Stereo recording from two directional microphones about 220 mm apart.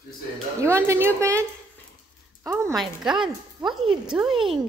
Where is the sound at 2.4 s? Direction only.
10° right (ahead or behind).